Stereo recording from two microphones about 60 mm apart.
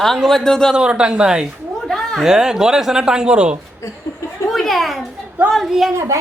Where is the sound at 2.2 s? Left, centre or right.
Centre.